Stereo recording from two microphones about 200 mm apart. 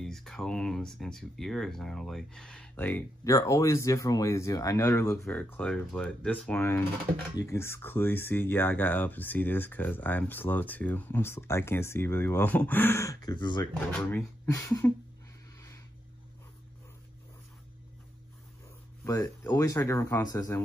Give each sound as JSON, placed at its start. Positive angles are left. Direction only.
{"t": 0.0, "sound": "speech", "side_deg": 0}
{"t": 13.7, "sound": "speech", "side_deg": 5}
{"t": 19.0, "sound": "speech", "side_deg": 15}